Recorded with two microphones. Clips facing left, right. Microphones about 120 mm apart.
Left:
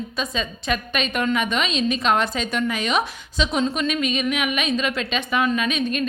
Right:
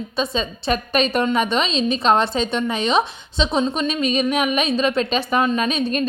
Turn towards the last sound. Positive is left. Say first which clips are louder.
# right 2 dB
turn(degrees=-35)  # may be behind; listen again after turning